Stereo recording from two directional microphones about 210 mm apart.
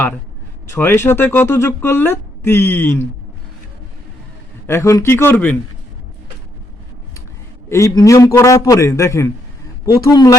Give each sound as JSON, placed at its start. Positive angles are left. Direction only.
{"t": 0.7, "sound": "speech", "side_deg": 10}
{"t": 4.6, "sound": "speech", "side_deg": 10}
{"t": 7.7, "sound": "speech", "side_deg": 15}